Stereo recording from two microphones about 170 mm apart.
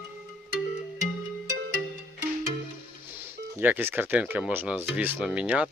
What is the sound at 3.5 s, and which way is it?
Speech, 10° right (ahead or behind).